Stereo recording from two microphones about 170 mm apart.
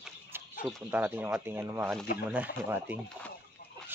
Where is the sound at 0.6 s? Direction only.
10° right (ahead or behind).